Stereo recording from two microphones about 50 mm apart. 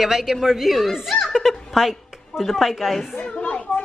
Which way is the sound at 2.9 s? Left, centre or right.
Centre.